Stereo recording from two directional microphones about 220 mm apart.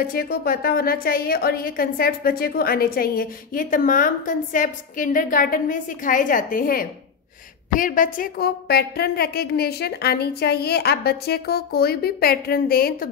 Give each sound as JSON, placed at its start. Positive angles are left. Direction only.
{"t": 0.0, "sound": "a woman's voice", "side_deg": 40}